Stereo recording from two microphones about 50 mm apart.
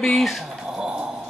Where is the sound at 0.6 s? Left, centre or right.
Centre.